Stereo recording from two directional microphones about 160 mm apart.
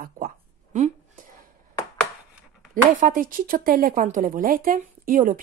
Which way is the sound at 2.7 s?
55° right (ahead or behind).